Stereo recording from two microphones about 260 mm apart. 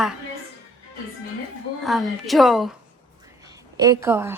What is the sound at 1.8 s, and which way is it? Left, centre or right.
Speech, centre.